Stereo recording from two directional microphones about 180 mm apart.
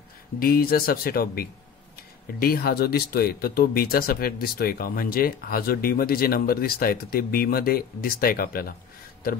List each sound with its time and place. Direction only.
0.4 s speech: 55° left (ahead or behind)